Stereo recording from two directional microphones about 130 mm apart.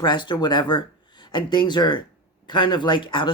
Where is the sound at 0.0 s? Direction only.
35° left (ahead or behind).